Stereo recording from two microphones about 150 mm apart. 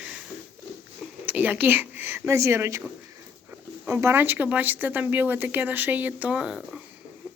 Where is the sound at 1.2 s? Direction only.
10° right (ahead or behind).